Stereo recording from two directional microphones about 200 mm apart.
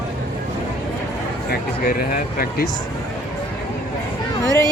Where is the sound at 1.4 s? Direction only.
45° left (ahead or behind).